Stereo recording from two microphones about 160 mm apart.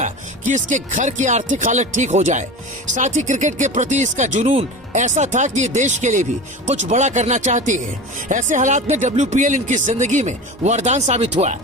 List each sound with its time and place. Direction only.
0.0 s speech: 50° right (ahead or behind)